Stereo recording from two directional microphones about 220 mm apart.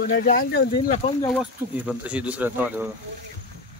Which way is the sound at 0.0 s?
40° left (ahead or behind).